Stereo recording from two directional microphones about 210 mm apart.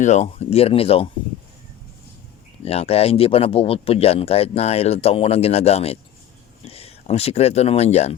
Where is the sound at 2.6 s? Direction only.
30° left (ahead or behind).